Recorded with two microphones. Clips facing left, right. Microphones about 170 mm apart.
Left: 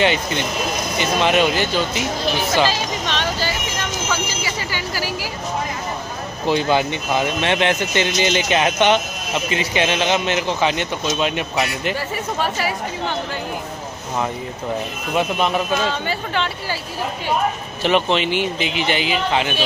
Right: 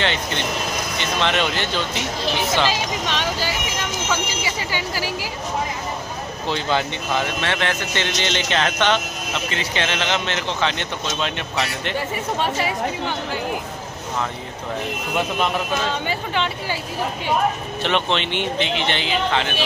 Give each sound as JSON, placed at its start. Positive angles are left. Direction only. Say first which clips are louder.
{"t": 0.0, "sound": "speech", "louder": "left 4 dB", "side_deg": 10}
{"t": 2.7, "sound": "vehicle", "louder": "left 1 dB", "side_deg": -10}
{"t": 4.7, "sound": "a sound", "louder": "even", "side_deg": -25}
{"t": 6.4, "sound": "speech", "louder": "left 5 dB", "side_deg": 10}
{"t": 12.4, "sound": "speech", "louder": "left 1 dB", "side_deg": -25}
{"t": 15.9, "sound": "speech", "louder": "left 1 dB", "side_deg": -15}
{"t": 17.8, "sound": "speech", "louder": "left 4 dB", "side_deg": 5}